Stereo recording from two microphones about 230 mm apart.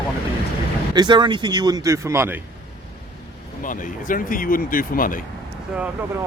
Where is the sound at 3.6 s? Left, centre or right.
Left.